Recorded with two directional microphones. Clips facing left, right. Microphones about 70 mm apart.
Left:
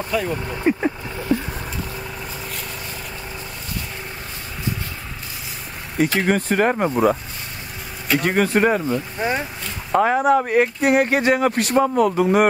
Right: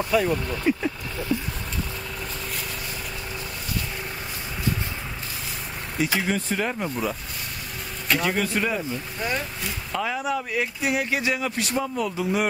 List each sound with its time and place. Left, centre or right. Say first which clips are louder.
0.1 s speech: right 1 dB; centre
0.7 s vehicle: left 5 dB; left
6.1 s speech: left 8 dB; left
8.2 s speech: left 9 dB; left
9.2 s speech: left 3 dB; left
9.9 s speech: left 11 dB; left